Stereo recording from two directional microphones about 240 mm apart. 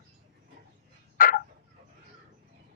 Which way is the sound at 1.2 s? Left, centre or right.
Left.